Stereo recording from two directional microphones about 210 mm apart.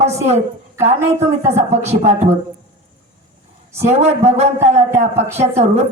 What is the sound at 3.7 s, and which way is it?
Speech, 30° right (ahead or behind).